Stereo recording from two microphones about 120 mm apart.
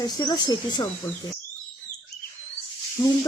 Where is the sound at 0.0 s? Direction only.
35° left (ahead or behind).